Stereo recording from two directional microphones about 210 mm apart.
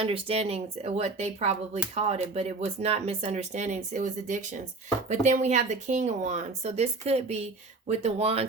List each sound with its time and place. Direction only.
0.0 s speech: 25° right (ahead or behind)